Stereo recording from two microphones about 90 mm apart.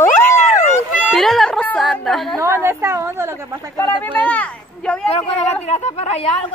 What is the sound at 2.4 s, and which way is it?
A woman's voice, 30° right (ahead or behind).